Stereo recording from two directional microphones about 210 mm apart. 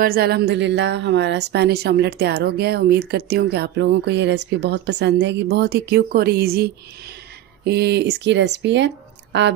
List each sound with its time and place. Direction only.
0.0 s speech: 45° right (ahead or behind)